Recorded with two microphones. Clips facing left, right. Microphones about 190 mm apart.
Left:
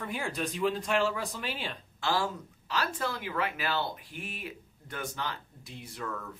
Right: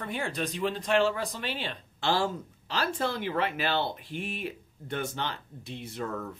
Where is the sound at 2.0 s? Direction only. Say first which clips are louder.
Right 3 dB; 30° right (ahead or behind).